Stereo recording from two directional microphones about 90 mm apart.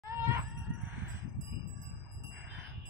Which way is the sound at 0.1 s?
30° right (ahead or behind).